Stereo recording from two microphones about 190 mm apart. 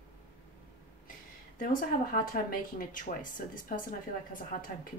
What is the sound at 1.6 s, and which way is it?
Speech, 45° left (ahead or behind).